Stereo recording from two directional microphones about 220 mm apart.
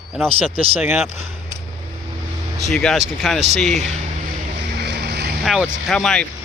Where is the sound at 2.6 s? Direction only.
Centre (ahead or behind).